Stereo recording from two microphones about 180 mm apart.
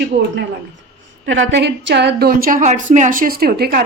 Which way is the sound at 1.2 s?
90° right.